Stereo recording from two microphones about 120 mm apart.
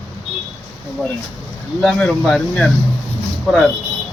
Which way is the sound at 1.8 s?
5° left (ahead or behind).